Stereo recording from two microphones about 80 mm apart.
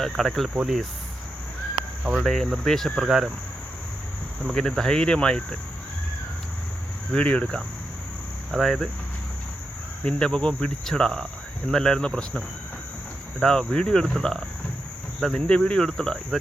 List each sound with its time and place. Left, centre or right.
0.0 s speech: centre
2.1 s speech: centre
4.5 s cricket: centre
7.1 s cricket: centre
8.5 s speech: centre
10.0 s cricket: centre
13.4 s cricket: centre